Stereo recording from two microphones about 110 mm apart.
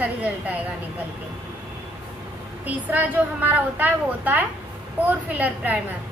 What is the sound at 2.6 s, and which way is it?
A woman's voice, 15° right (ahead or behind).